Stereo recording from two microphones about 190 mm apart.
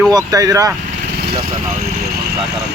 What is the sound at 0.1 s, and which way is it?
Speech, 20° right (ahead or behind).